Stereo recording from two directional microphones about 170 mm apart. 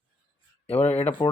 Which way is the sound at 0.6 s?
40° left (ahead or behind).